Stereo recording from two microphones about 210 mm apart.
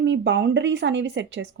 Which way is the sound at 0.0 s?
55° right (ahead or behind).